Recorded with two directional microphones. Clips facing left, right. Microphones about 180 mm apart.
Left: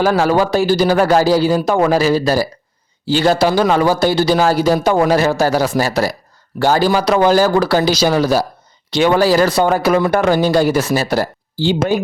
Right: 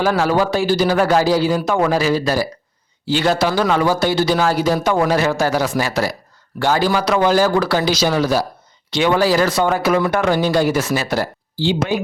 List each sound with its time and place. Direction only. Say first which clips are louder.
0.2 s a man's voice: left 3 dB; 40° left (ahead or behind)